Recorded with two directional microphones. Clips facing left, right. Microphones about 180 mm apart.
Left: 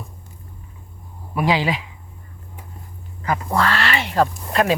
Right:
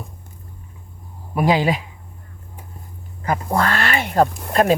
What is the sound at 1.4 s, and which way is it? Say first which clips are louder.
Speech: right 2 dB; 45° right (ahead or behind).